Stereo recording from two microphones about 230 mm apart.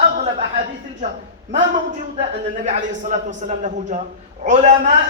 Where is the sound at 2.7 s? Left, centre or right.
Right.